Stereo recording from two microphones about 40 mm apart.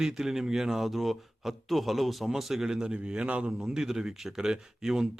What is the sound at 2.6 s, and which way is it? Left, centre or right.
Speech, centre.